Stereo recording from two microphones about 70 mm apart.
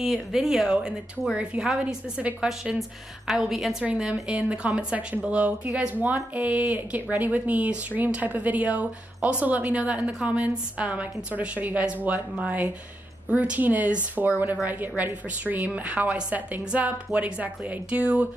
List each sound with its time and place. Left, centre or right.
0.0 s a woman's voice: centre
3.8 s speech: centre